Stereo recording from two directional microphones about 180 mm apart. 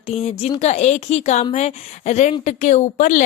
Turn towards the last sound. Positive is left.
turn(degrees=45)  # may be behind; listen again after turning